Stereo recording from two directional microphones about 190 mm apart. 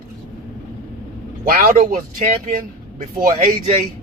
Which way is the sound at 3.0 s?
30° right (ahead or behind).